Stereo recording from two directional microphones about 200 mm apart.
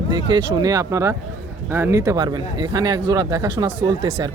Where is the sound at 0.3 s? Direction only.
20° right (ahead or behind).